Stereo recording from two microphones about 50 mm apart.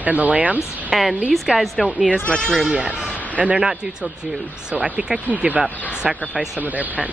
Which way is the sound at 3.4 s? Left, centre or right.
Right.